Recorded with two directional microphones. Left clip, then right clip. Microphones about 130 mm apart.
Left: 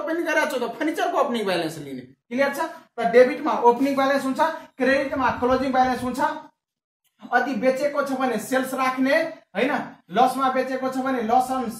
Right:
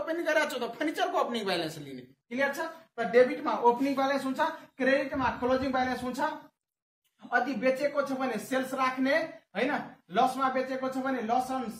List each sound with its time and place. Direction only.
0.0 s speech: 20° right (ahead or behind)
7.2 s speech: 5° right (ahead or behind)